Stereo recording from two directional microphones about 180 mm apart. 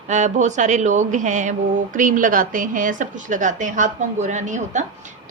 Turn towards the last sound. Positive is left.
turn(degrees=-45)  # may be behind; listen again after turning